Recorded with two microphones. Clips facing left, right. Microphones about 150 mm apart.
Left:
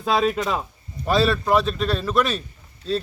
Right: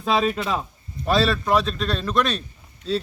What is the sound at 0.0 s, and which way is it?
A man's voice, centre (ahead or behind).